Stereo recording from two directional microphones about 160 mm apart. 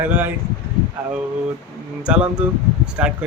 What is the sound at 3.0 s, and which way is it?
Speech, 10° right (ahead or behind).